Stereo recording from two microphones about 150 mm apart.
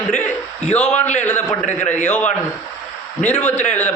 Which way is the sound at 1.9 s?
55° left (ahead or behind).